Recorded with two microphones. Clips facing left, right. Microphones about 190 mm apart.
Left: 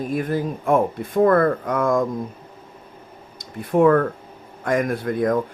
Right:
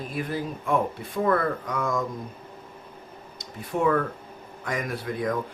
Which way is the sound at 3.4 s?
55° left (ahead or behind).